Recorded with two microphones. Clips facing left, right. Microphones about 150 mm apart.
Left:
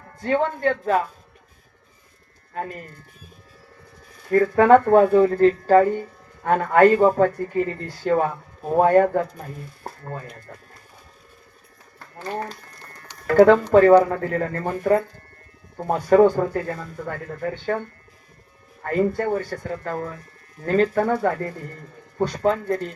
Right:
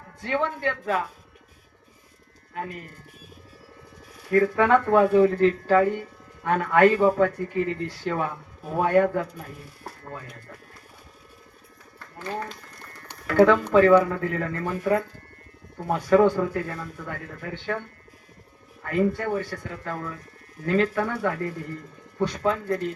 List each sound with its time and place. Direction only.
0.2 s speech: 40° left (ahead or behind)
2.5 s speech: 40° left (ahead or behind)
4.3 s speech: 40° left (ahead or behind)
9.8 s a sound: 45° left (ahead or behind)
12.2 s speech: 35° left (ahead or behind)